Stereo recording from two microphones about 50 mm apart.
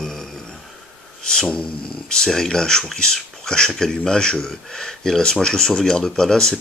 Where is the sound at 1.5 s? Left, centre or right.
Centre.